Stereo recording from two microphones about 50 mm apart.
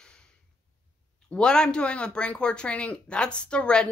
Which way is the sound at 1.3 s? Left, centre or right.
Centre.